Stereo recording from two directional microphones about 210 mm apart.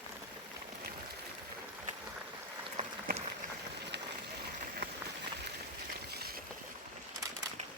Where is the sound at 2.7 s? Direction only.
35° right (ahead or behind).